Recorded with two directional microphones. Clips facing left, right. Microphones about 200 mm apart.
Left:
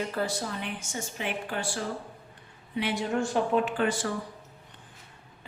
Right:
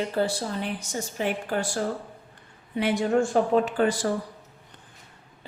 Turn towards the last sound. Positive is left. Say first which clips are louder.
# right 4 dB
turn(degrees=-40)  # may be behind; listen again after turning